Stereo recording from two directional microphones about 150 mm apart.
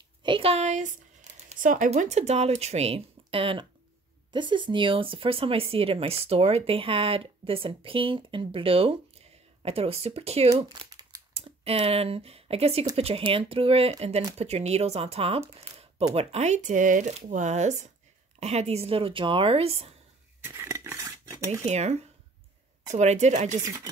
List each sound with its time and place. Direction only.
0.2 s speech: 35° right (ahead or behind)
10.9 s crumpling: 25° right (ahead or behind)
11.3 s speech: 40° right (ahead or behind)
20.4 s cutlery: 20° right (ahead or behind)
21.6 s speech: 45° right (ahead or behind)
23.6 s chopping: 20° right (ahead or behind)